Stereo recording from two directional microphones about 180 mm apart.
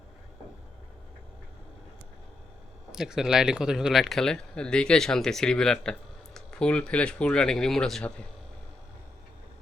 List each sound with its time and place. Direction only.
2.9 s speech: 5° right (ahead or behind)